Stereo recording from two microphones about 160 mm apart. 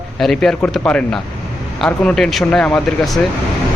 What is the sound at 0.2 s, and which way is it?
Speech, 5° left (ahead or behind).